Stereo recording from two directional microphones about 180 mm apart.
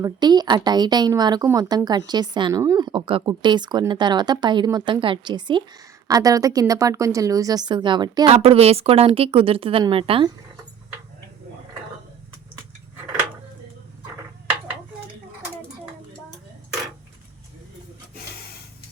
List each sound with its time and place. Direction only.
0.0 s a woman's voice: 25° right (ahead or behind)